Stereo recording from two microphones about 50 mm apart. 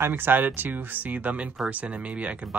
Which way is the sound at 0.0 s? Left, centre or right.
Right.